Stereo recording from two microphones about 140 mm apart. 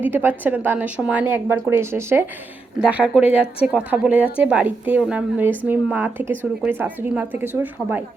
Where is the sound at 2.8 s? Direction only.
5° right (ahead or behind).